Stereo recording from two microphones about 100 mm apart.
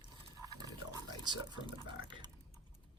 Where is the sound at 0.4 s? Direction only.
35° right (ahead or behind); by 2.3 s 50° right (ahead or behind).